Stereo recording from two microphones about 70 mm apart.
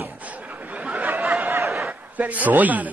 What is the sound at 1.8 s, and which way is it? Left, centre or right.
A man's voice, right.